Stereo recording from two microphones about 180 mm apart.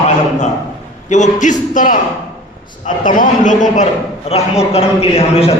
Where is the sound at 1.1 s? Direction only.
45° left (ahead or behind).